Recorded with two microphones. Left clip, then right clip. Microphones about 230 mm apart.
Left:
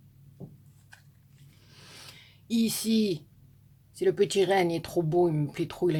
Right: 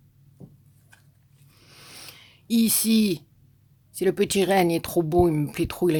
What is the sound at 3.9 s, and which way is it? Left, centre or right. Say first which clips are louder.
Speech: right 2 dB; right.